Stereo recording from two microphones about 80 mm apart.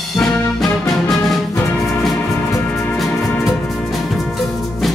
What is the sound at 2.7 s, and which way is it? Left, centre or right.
Music, centre.